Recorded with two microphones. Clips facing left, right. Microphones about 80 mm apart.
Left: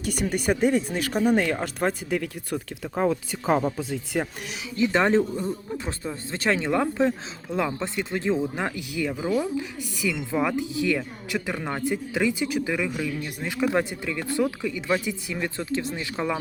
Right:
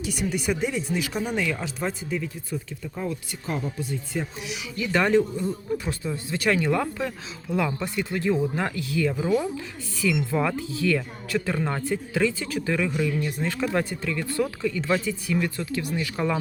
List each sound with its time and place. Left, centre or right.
0.0 s speech: left
3.5 s speech: left
4.8 s speech: left